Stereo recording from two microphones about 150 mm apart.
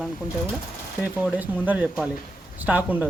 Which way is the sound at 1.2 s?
10° right (ahead or behind).